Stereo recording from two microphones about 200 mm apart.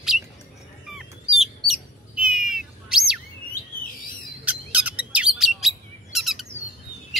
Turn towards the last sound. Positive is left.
turn(degrees=0)  # may be behind; listen again after turning